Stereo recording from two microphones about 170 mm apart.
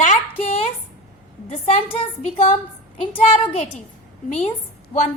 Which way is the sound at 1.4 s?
35° left (ahead or behind).